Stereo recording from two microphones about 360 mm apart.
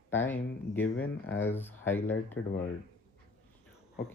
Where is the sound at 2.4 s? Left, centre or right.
Left.